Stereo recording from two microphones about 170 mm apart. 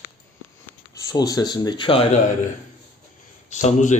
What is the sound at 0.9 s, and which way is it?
Speech, 20° left (ahead or behind).